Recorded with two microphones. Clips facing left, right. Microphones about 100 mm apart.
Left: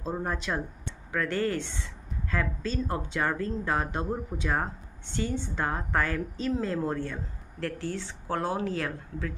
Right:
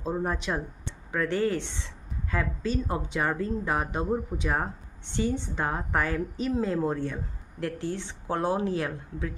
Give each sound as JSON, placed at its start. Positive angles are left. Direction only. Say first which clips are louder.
{"t": 0.2, "sound": "speech", "louder": "right 2 dB", "side_deg": -10}